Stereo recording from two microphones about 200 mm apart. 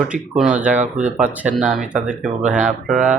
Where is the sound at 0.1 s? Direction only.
5° right (ahead or behind).